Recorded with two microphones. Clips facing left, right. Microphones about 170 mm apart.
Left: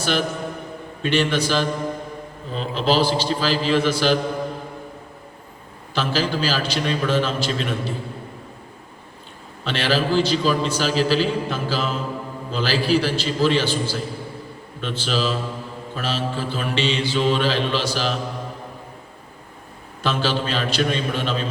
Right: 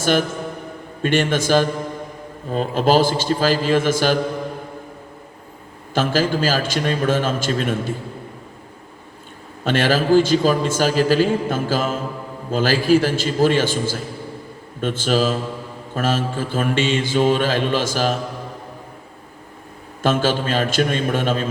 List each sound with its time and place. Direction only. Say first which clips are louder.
0.0 s a man's voice: right 4 dB; 50° right (ahead or behind)
5.9 s a man's voice: right 4 dB; 50° right (ahead or behind)
9.6 s a man's voice: right 5 dB; 50° right (ahead or behind)
20.0 s a man's voice: right 4 dB; 50° right (ahead or behind)